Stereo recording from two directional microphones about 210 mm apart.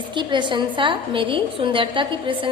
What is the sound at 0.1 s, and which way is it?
A woman's voice, 20° right (ahead or behind).